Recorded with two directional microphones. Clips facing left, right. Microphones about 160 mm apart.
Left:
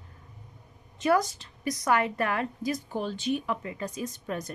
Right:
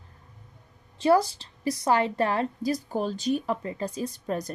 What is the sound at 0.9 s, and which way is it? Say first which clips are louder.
Speech: right 3 dB; 30° right (ahead or behind).